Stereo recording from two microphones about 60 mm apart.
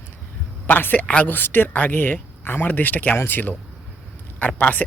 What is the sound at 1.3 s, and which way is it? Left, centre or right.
Speech, left.